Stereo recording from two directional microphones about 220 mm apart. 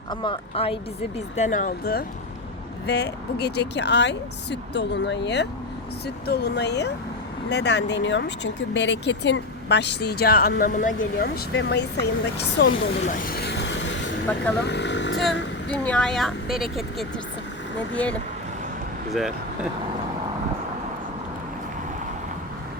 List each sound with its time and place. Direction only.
0.1 s a woman's voice: 20° left (ahead or behind)
1.4 s speech: 35° left (ahead or behind); by 12.0 s 50° left (ahead or behind)
12.7 s a sound: 35° left (ahead or behind); by 14.1 s 55° left (ahead or behind)
14.3 s speech: 5° left (ahead or behind)
14.6 s speech: 50° left (ahead or behind)
15.7 s speech: 5° left (ahead or behind)